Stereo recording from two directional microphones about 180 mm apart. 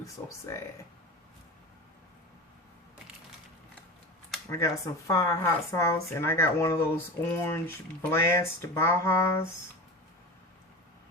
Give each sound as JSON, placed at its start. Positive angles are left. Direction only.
{"t": 0.0, "sound": "speech", "side_deg": 15}
{"t": 4.4, "sound": "speech", "side_deg": 15}